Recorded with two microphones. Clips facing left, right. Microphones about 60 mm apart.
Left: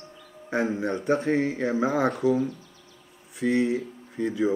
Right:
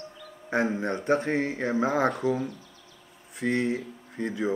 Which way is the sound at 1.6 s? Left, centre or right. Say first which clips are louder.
Right 1 dB; centre.